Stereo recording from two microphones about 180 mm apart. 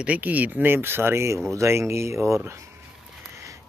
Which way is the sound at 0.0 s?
10° right (ahead or behind).